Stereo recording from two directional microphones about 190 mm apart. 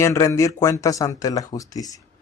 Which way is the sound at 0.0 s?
15° left (ahead or behind).